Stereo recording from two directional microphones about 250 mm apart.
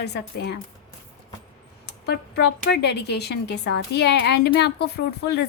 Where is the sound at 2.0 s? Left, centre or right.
Left.